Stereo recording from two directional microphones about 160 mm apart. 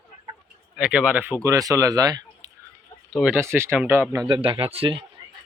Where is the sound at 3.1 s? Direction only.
Centre (ahead or behind).